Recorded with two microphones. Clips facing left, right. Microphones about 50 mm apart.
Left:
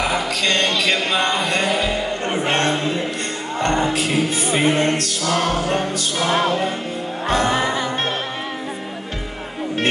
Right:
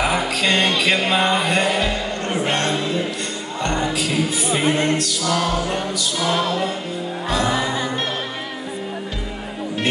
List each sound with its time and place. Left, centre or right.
0.0 s music: centre
2.5 s a sound: left
3.6 s music: left